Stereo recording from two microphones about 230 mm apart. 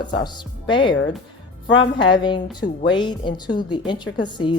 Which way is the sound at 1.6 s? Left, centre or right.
Left.